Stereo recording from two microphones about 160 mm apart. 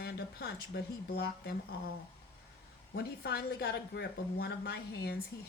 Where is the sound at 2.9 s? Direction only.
80° left.